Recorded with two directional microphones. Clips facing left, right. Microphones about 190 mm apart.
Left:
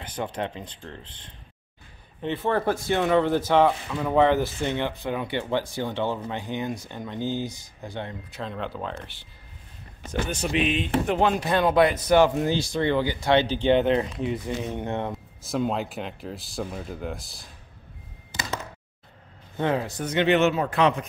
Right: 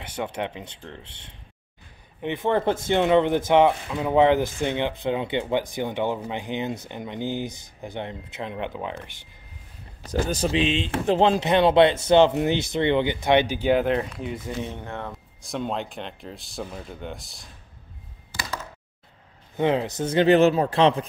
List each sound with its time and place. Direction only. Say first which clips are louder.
0.0 s speech: right 1 dB; 10° right (ahead or behind)
1.0 s speech: even; 70° right (ahead or behind)
2.2 s speech: right 2 dB; 15° right (ahead or behind)
10.1 s speech: right 3 dB; 35° right (ahead or behind); by 14.5 s centre (ahead or behind)
14.8 s speech: left 5 dB; 20° left (ahead or behind)
15.4 s speech: left 2 dB; centre (ahead or behind)
18.3 s a sound: left 1 dB; 25° left (ahead or behind)
19.5 s speech: right 3 dB; 20° right (ahead or behind)